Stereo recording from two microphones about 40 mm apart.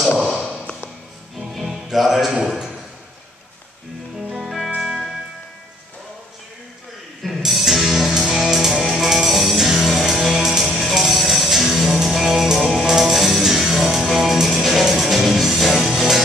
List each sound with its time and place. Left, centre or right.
0.3 s a sound: centre
1.4 s music: centre
2.1 s a man's voice: centre
4.3 s music: centre
7.2 s music: centre